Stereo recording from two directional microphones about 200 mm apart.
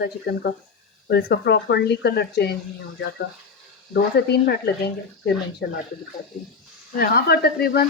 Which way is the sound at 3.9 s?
55° left (ahead or behind).